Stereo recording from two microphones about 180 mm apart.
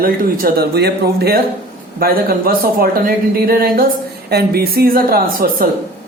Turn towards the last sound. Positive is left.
turn(degrees=-55)  # may be behind; listen again after turning